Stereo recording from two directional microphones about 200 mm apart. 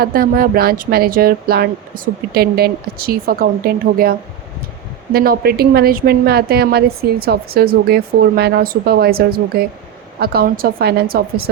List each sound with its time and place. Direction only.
0.0 s a woman's voice: 45° right (ahead or behind)
5.1 s a woman's voice: 50° right (ahead or behind)